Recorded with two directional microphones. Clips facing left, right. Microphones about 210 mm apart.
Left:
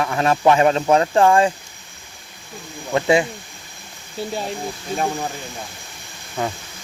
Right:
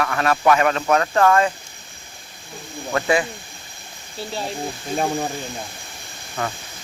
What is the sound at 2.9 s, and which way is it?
Speech, 25° left (ahead or behind).